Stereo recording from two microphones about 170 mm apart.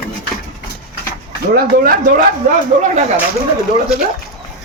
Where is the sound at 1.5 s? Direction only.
60° right (ahead or behind).